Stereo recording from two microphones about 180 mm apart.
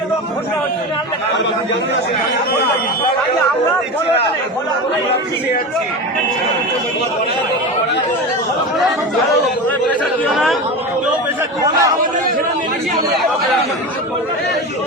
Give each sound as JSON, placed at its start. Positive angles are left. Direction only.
{"t": 9.6, "sound": "speech", "side_deg": 5}
{"t": 11.6, "sound": "a man's voice", "side_deg": -20}